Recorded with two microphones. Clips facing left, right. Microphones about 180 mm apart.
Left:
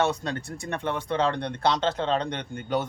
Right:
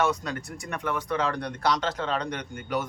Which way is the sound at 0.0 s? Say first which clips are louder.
Left 1 dB; 30° left (ahead or behind).